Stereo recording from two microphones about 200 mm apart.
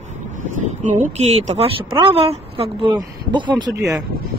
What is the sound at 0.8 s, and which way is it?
Speech, 35° right (ahead or behind).